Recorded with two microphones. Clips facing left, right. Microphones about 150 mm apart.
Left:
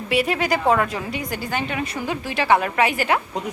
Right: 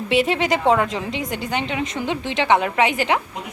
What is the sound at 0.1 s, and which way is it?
A woman's voice, 25° right (ahead or behind).